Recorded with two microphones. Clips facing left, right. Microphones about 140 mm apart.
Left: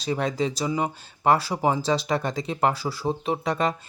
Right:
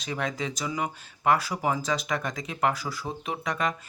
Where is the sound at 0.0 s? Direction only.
35° left (ahead or behind).